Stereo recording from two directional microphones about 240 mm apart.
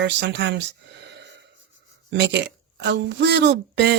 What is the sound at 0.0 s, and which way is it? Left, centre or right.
Speech, right.